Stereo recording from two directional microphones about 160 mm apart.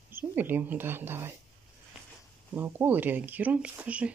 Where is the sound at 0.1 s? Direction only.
10° right (ahead or behind).